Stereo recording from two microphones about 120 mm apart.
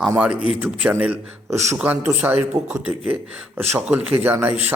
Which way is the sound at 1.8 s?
15° right (ahead or behind).